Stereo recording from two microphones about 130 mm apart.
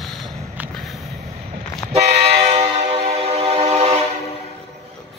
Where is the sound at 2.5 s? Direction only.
55° right (ahead or behind).